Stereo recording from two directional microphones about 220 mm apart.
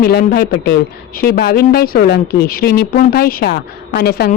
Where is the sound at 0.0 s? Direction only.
45° left (ahead or behind).